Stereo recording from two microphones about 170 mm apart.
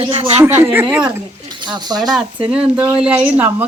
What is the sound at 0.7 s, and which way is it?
Speech, 10° right (ahead or behind).